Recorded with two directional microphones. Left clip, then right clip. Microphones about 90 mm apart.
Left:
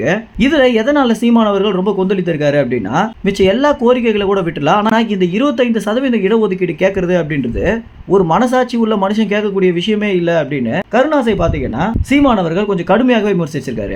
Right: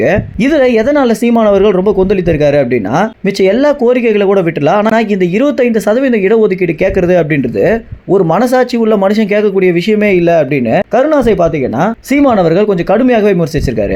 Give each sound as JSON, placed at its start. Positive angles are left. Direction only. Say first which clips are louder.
{"t": 0.0, "sound": "speech", "louder": "right 4 dB", "side_deg": -35}
{"t": 13.0, "sound": "speech", "louder": "right 4 dB", "side_deg": -35}